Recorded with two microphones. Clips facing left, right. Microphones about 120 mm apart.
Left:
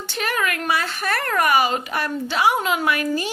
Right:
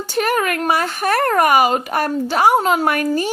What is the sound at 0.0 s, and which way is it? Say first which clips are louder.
Speech: right 6 dB; 40° right (ahead or behind).